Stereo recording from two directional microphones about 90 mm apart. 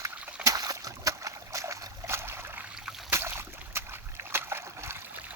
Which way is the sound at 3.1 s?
30° right (ahead or behind).